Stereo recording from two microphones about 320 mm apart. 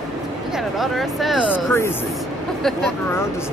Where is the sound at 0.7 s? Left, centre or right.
Centre.